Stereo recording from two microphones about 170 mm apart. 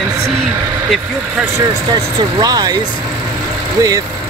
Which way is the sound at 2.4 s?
20° right (ahead or behind).